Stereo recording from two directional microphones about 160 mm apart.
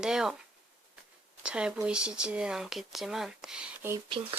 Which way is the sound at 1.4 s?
5° right (ahead or behind).